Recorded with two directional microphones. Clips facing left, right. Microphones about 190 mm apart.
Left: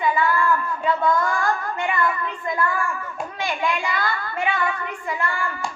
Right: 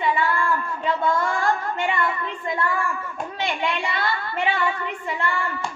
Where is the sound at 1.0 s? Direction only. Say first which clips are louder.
Even; 30° right (ahead or behind).